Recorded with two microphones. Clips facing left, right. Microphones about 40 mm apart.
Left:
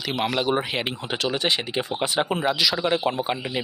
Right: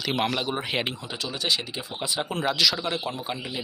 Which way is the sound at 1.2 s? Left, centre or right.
Left.